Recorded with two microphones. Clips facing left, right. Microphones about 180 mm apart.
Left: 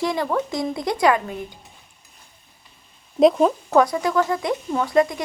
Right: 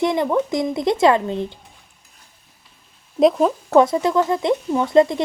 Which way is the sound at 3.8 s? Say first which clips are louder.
Right 3 dB; 25° right (ahead or behind).